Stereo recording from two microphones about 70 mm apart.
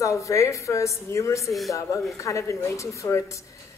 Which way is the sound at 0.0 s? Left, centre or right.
Left.